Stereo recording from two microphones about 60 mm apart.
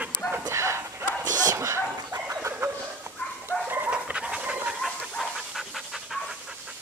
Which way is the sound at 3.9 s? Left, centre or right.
Centre.